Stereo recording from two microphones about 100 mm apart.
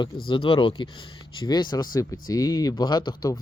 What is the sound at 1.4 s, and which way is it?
Speech, 45° left (ahead or behind).